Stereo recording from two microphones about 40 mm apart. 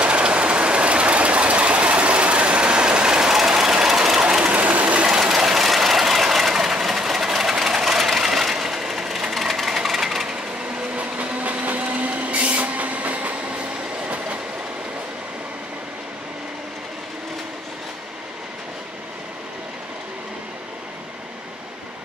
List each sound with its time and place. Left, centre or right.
0.0 s vehicle: right; by 4.2 s centre
4.2 s sewing machine: right
4.6 s train: right
5.0 s vehicle: centre
8.2 s a sound: centre
11.0 s a sound: right
14.0 s train: right